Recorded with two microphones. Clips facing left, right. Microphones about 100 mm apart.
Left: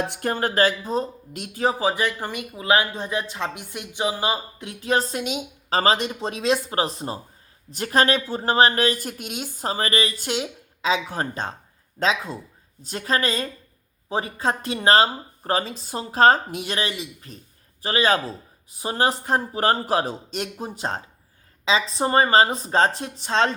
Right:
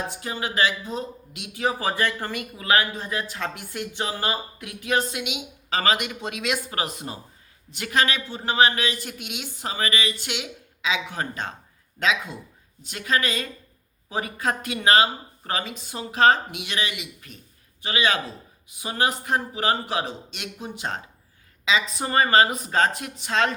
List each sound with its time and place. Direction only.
0.1 s speech: 55° left (ahead or behind)
1.8 s speech: 15° left (ahead or behind)